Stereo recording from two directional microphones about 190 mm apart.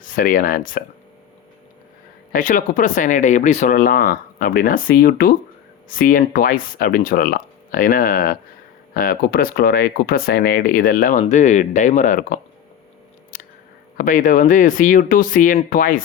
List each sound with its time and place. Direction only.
0.0 s speech: 45° left (ahead or behind)
2.3 s speech: 45° left (ahead or behind)
13.3 s a sound: 45° left (ahead or behind)
13.9 s speech: 45° left (ahead or behind)